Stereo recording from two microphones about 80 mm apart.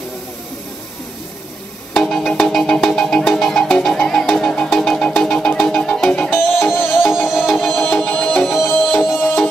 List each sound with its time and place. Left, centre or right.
2.0 s music: centre
6.3 s music: left
6.9 s music: centre
7.7 s music: left